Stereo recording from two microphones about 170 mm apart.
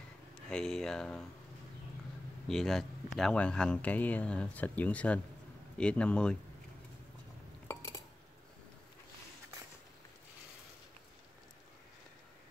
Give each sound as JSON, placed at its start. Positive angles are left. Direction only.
{"t": 0.5, "sound": "speech", "side_deg": 5}
{"t": 2.4, "sound": "speech", "side_deg": 0}
{"t": 7.6, "sound": "dishes", "side_deg": 20}